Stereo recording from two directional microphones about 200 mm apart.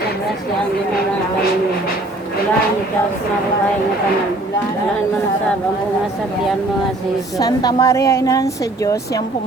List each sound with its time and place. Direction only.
7.3 s a woman's voice: 20° left (ahead or behind)